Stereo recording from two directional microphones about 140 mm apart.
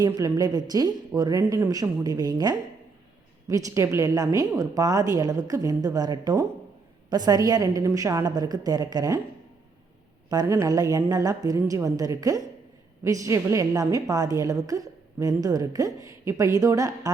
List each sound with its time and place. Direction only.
0.0 s a woman's voice: 25° right (ahead or behind)
10.2 s a woman's voice: 25° right (ahead or behind)